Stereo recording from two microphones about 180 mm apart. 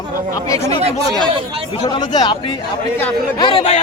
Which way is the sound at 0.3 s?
20° left (ahead or behind).